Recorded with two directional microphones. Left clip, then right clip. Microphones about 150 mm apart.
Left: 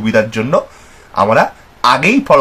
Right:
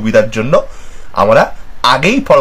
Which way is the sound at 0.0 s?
25° right (ahead or behind).